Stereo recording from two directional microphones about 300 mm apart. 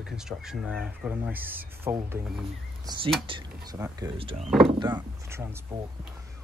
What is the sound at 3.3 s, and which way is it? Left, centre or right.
Speech, centre.